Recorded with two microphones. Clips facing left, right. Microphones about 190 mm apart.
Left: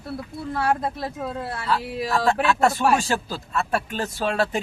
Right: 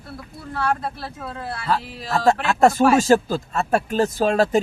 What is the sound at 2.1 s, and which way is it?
Speech, 40° right (ahead or behind).